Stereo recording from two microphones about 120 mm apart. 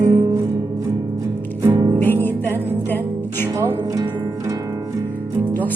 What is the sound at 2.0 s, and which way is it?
Music, 15° left (ahead or behind).